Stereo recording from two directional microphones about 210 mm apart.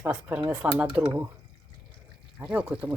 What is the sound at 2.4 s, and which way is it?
Speech, 5° right (ahead or behind).